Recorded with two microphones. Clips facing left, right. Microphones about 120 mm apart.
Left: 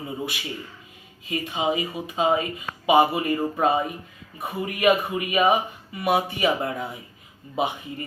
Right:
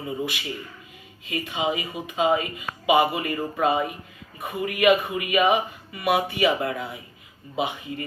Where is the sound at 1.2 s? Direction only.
35° left (ahead or behind).